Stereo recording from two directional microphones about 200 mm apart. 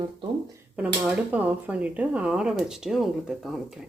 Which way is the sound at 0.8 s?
5° right (ahead or behind).